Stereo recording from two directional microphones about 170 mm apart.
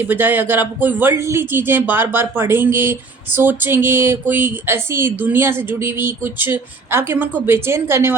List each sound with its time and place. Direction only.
0.0 s speech: 10° right (ahead or behind)